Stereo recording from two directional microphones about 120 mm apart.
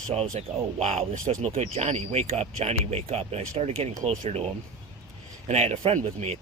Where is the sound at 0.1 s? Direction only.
60° right (ahead or behind).